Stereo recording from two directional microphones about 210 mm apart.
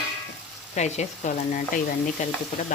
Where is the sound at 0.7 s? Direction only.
35° left (ahead or behind).